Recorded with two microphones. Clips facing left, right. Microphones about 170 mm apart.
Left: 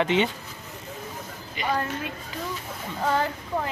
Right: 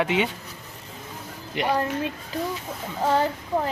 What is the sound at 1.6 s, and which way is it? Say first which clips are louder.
Speech: right 4 dB; 70° right (ahead or behind).